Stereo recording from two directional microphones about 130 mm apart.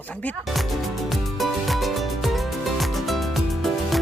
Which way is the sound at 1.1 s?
Centre (ahead or behind).